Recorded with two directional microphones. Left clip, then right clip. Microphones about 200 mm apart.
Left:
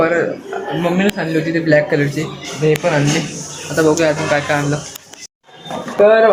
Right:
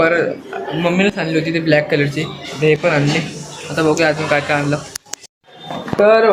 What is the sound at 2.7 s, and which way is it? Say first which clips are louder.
Speech: right 1 dB; 20° right (ahead or behind).